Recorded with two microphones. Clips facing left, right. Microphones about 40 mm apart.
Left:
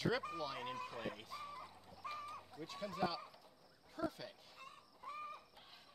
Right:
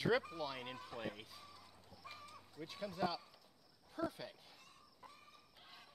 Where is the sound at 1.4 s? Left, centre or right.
Left.